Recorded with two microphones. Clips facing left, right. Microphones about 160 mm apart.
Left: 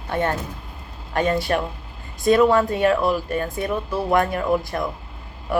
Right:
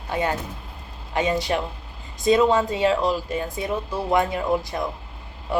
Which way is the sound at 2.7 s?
55° left (ahead or behind).